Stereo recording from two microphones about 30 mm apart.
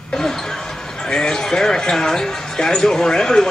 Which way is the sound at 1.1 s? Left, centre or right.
Left.